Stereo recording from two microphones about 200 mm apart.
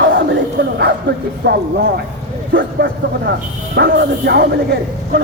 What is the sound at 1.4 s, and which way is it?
Speech, 55° right (ahead or behind).